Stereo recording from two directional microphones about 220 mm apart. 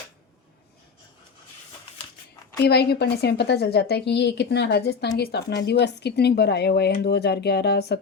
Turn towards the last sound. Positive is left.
turn(degrees=45)  # may be behind; listen again after turning